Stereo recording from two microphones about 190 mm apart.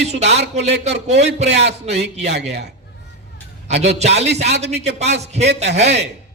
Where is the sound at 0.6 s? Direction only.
35° right (ahead or behind).